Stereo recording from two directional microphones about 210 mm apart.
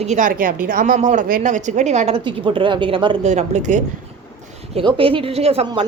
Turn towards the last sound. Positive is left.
turn(degrees=-25)  # may be behind; listen again after turning